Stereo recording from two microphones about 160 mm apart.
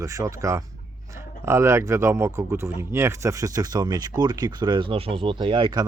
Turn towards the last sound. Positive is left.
turn(degrees=-25)  # may be behind; listen again after turning